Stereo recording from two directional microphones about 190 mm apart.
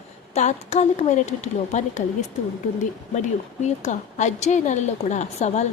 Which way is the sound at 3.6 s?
40° left (ahead or behind).